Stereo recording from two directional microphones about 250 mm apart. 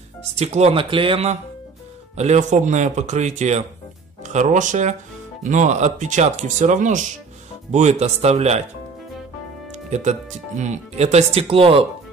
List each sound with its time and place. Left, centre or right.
0.4 s speech: right
9.8 s speech: right